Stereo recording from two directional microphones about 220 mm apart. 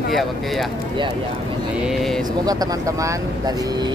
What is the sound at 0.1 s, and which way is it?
Speech, centre (ahead or behind).